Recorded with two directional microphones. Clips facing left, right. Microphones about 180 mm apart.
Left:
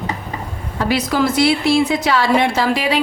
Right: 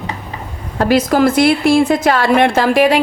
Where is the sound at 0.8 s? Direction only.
50° right (ahead or behind).